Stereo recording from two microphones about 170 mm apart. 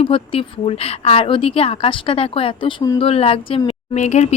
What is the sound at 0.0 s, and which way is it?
Speech, 35° left (ahead or behind).